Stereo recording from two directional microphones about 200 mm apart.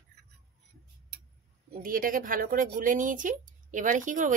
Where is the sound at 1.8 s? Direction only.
45° right (ahead or behind).